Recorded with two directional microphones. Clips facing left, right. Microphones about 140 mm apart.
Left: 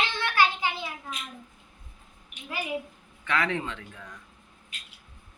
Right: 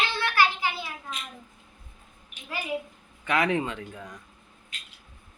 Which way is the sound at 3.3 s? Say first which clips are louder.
Right 3 dB; 15° right (ahead or behind).